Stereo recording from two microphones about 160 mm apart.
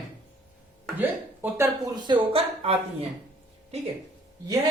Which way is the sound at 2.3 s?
40° right (ahead or behind).